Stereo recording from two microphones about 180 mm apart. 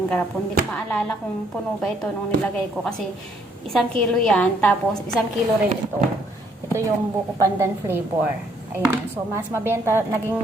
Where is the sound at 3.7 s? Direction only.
5° left (ahead or behind).